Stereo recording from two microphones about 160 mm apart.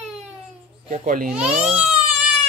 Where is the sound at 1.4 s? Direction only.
45° right (ahead or behind).